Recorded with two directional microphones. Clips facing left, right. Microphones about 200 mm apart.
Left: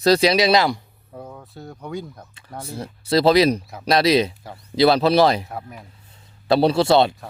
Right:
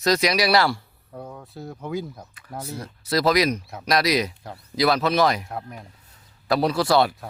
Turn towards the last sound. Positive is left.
turn(degrees=25)  # may be behind; listen again after turning